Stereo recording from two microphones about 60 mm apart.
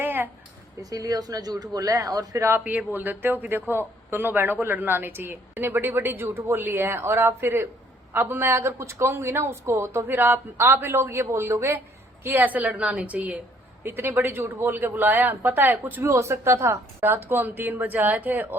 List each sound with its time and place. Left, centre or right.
0.0 s a sound: right
0.8 s a man's voice: right
2.6 s speech: right
8.1 s speech: right
10.8 s speech: right
12.4 s a woman's voice: right
13.8 s speech: right
16.0 s speech: right
17.1 s speech: right